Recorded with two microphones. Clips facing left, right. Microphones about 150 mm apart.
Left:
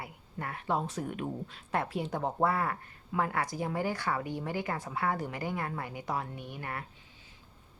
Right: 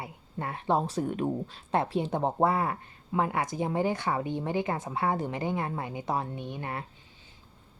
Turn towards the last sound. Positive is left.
turn(degrees=-25)  # may be behind; listen again after turning